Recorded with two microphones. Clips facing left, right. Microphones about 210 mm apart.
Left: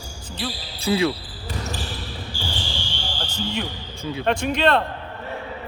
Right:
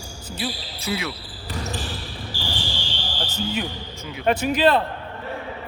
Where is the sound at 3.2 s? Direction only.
5° right (ahead or behind).